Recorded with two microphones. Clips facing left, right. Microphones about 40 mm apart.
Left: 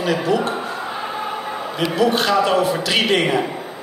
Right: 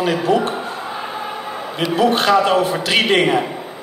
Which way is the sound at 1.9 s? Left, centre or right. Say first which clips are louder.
Right 3 dB; right.